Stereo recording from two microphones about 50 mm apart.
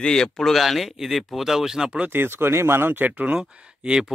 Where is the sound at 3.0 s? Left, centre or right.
Right.